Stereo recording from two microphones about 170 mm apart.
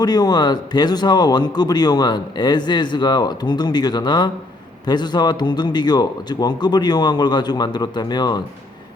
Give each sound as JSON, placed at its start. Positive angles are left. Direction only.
{"t": 0.0, "sound": "speech", "side_deg": 25}